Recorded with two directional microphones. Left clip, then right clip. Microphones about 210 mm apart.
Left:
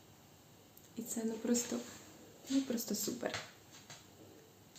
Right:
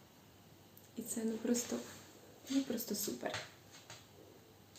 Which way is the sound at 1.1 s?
10° left (ahead or behind).